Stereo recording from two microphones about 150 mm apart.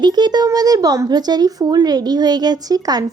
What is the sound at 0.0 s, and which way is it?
Speech, 30° right (ahead or behind).